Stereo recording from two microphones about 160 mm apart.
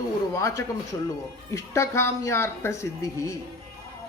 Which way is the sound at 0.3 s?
20° left (ahead or behind).